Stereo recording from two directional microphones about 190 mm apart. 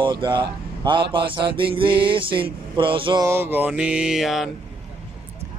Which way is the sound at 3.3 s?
10° right (ahead or behind).